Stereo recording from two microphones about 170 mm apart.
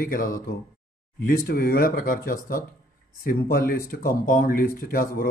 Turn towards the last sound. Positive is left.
turn(degrees=60)  # may be behind; listen again after turning